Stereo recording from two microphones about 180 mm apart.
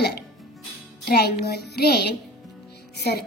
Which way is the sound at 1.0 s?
60° left (ahead or behind).